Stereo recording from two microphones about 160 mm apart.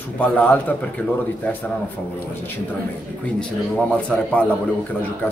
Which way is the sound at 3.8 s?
5° left (ahead or behind).